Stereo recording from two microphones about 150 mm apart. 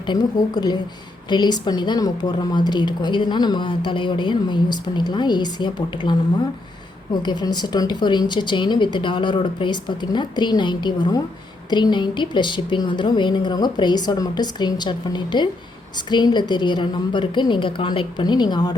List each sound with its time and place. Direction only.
0.0 s a woman's voice: 30° left (ahead or behind)
7.2 s speech: 30° left (ahead or behind)